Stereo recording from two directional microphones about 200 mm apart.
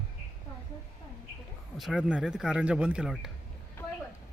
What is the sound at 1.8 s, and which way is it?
Speech, 5° right (ahead or behind).